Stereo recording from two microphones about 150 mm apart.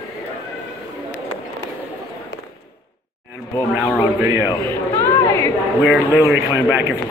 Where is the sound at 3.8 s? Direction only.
15° right (ahead or behind).